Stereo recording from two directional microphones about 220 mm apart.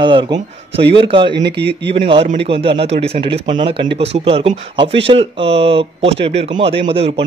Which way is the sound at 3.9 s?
50° right (ahead or behind).